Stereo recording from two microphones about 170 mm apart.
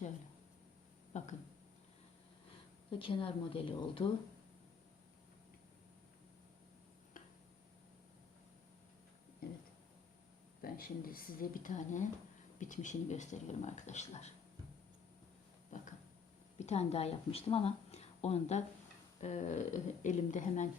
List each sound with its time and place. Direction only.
1.1 s speech: 45° left (ahead or behind)
3.0 s speech: 30° left (ahead or behind)
10.6 s speech: 60° left (ahead or behind); by 14.3 s 40° left (ahead or behind)
16.6 s speech: 40° left (ahead or behind)